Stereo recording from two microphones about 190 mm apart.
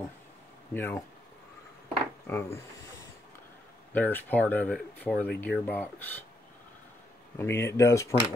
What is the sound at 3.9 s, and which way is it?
Speech, 10° left (ahead or behind).